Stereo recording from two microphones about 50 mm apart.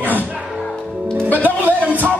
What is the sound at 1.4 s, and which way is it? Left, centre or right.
Music, right.